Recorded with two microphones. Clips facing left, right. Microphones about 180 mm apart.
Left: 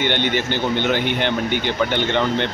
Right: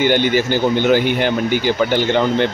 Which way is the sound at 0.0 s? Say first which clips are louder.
Right 6 dB; 5° right (ahead or behind).